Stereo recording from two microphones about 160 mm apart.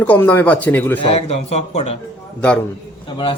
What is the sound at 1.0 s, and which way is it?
Speech, 40° left (ahead or behind).